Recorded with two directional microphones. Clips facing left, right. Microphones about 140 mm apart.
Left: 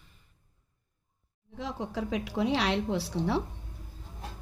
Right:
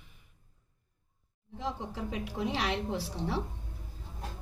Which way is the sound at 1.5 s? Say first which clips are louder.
Left 2 dB; 90° left.